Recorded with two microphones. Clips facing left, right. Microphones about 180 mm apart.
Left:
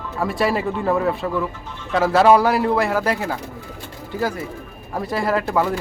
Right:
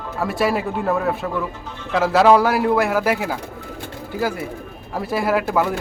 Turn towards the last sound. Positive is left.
turn(degrees=-5)  # may be behind; listen again after turning